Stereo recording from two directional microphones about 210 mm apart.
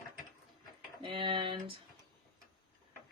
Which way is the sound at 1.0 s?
25° right (ahead or behind).